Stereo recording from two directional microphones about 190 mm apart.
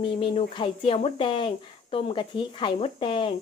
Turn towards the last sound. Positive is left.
turn(degrees=25)  # may be behind; listen again after turning